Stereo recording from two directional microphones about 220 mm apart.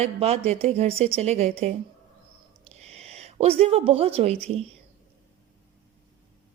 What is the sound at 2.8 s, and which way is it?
Speech, 30° right (ahead or behind).